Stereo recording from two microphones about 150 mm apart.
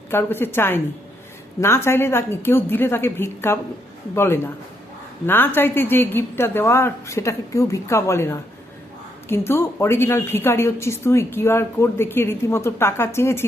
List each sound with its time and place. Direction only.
0.1 s a woman's voice: 15° left (ahead or behind)